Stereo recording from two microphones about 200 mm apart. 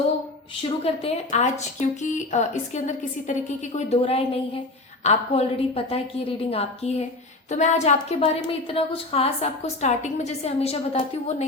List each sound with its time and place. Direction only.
0.6 s a woman's voice: 30° left (ahead or behind)